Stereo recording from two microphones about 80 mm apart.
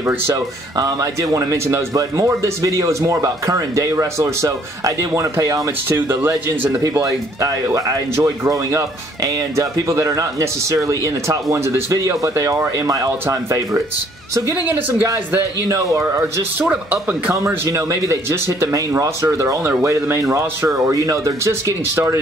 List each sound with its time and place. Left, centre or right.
0.3 s speech: right
5.9 s speech: right
6.8 s speech: right
14.5 s speech: right
15.3 s speech: right
16.5 s speech: centre
17.6 s speech: right